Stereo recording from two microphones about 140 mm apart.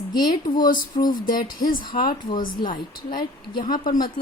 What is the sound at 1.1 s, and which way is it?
Speech, 85° left.